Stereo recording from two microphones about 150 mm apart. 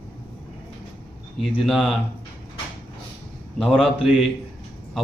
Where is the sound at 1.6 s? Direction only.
Centre (ahead or behind).